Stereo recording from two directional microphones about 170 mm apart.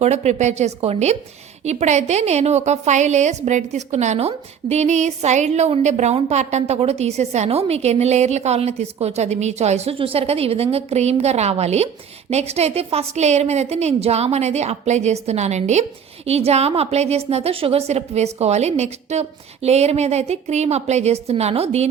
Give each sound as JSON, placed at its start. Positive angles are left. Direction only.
{"t": 0.0, "sound": "a woman's voice", "side_deg": -40}